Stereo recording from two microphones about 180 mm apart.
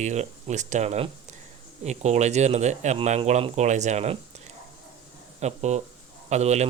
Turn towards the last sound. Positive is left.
turn(degrees=-40)  # may be behind; listen again after turning